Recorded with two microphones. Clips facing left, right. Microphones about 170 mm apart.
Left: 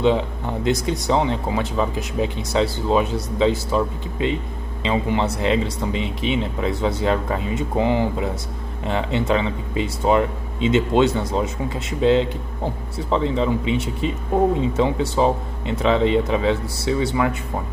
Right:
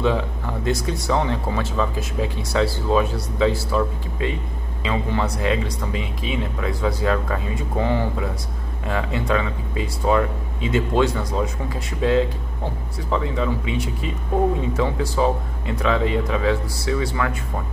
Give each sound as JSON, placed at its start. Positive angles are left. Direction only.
{"t": 0.0, "sound": "speech", "side_deg": 20}